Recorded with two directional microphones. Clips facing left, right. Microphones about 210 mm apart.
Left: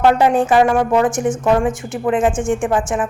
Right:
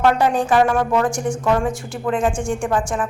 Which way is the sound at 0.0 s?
20° left (ahead or behind).